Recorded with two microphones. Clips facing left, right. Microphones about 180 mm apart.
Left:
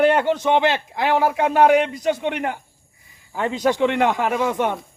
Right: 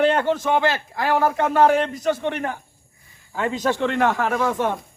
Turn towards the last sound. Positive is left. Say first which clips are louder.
# left 1 dB
turn(degrees=20)  # may be behind; listen again after turning